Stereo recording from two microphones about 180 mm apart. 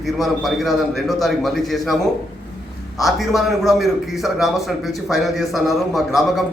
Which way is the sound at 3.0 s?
Centre (ahead or behind).